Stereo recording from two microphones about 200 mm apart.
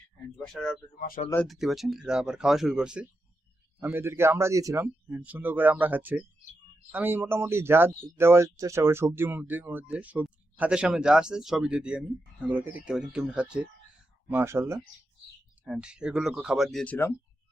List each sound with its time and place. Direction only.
0.3 s speech: 5° left (ahead or behind)
0.9 s speech: 45° left (ahead or behind)
1.3 s speech: 5° left (ahead or behind)